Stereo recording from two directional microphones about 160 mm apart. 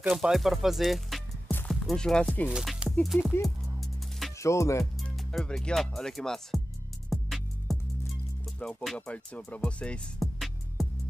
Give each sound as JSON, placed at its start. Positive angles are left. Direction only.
{"t": 0.0, "sound": "speech", "side_deg": 0}
{"t": 2.5, "sound": "speech", "side_deg": 0}
{"t": 4.4, "sound": "music", "side_deg": 20}
{"t": 5.1, "sound": "speech", "side_deg": 0}
{"t": 7.1, "sound": "music", "side_deg": 0}